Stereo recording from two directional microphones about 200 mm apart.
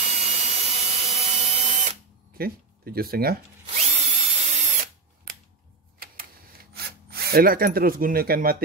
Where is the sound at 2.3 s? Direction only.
50° right (ahead or behind).